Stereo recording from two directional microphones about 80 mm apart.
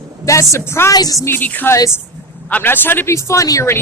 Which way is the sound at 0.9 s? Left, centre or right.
Left.